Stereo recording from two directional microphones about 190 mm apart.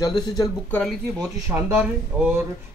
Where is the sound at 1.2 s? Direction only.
10° right (ahead or behind).